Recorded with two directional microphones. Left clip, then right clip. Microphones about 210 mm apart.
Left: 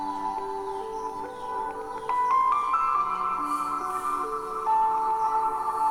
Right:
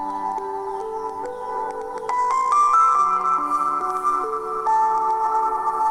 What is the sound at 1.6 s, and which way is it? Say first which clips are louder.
Music: right 4 dB; 40° right (ahead or behind).